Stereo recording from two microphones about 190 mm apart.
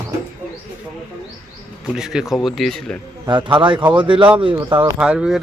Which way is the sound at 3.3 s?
25° right (ahead or behind).